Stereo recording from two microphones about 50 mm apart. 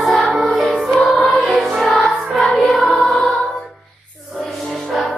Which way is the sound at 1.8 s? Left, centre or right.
Centre.